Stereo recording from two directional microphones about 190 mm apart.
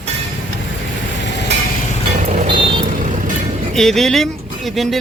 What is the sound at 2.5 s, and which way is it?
Vehicle, 25° right (ahead or behind).